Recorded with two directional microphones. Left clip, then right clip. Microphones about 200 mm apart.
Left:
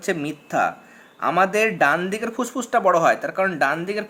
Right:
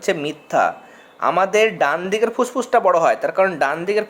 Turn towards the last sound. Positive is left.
turn(degrees=5)  # may be behind; listen again after turning